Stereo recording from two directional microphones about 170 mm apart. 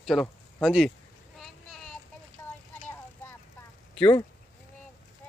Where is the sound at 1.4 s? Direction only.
5° left (ahead or behind).